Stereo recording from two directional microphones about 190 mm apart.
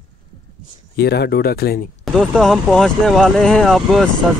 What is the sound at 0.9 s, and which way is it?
Speech, 60° left (ahead or behind).